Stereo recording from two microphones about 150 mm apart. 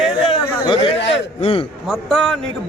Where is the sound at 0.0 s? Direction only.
35° left (ahead or behind).